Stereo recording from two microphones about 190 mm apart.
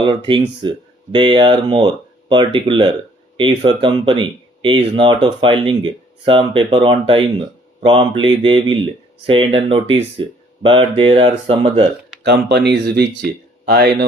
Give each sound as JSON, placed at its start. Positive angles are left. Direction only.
{"t": 0.0, "sound": "speech", "side_deg": -25}
{"t": 12.2, "sound": "speech", "side_deg": -60}